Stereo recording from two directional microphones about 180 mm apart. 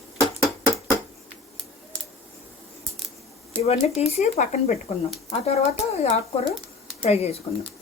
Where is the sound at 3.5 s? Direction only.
35° left (ahead or behind).